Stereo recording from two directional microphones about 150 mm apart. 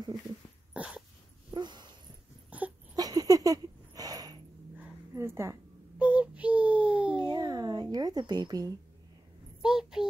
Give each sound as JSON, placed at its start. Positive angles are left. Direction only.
{"t": 0.7, "sound": "dog", "side_deg": -5}
{"t": 1.5, "sound": "dog", "side_deg": -30}
{"t": 2.5, "sound": "wail", "side_deg": -10}
{"t": 3.0, "sound": "a sound", "side_deg": -25}
{"t": 7.2, "sound": "a sound", "side_deg": -30}
{"t": 9.6, "sound": "child singing", "side_deg": -5}